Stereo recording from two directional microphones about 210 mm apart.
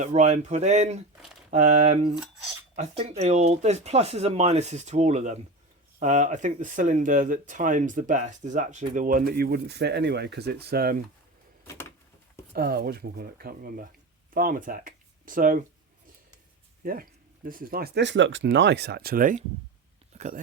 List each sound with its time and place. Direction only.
0.0 s speech: 35° right (ahead or behind)
12.5 s speech: 45° right (ahead or behind)
16.8 s speech: 45° right (ahead or behind)